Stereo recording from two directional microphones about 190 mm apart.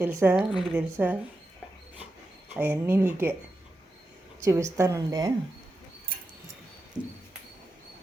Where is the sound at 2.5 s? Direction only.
10° right (ahead or behind).